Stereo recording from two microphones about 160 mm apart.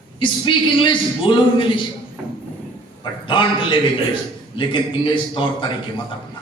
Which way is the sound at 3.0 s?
30° left (ahead or behind).